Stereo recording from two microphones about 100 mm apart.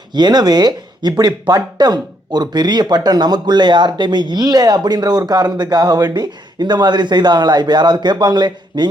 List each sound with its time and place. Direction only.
0.1 s speech: 45° right (ahead or behind)